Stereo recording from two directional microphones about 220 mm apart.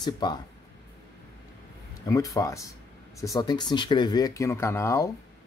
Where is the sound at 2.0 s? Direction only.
15° left (ahead or behind).